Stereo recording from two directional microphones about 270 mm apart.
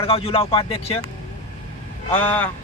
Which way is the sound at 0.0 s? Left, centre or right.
Left.